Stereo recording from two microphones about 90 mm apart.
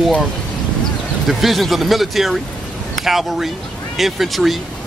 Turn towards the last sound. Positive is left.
turn(degrees=0)  # may be behind; listen again after turning